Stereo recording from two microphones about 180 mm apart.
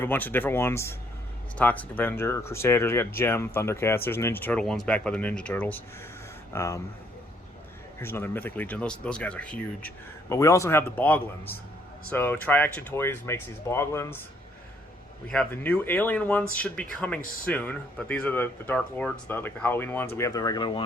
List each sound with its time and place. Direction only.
0.0 s speech: 10° left (ahead or behind)
8.0 s speech: 15° left (ahead or behind)
15.3 s speech: 5° left (ahead or behind); by 20.8 s 25° left (ahead or behind)